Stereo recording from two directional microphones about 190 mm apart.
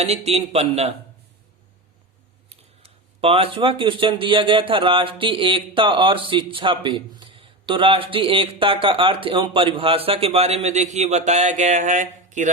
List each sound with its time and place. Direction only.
0.0 s a man's voice: 35° right (ahead or behind)
2.5 s speech: 30° right (ahead or behind)